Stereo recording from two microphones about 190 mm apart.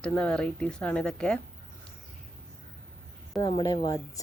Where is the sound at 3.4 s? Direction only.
20° left (ahead or behind).